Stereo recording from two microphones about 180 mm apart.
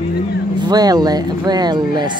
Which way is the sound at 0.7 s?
20° right (ahead or behind).